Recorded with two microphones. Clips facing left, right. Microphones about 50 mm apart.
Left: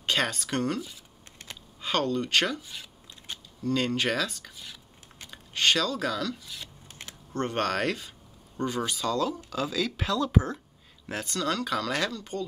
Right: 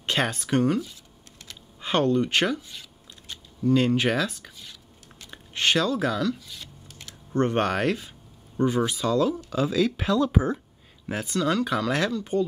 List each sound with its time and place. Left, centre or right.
0.0 s speech: centre
1.8 s speech: right
2.6 s speech: centre
3.6 s speech: centre
5.3 s speech: centre
6.4 s speech: centre
6.9 s typing: left
7.3 s speech: centre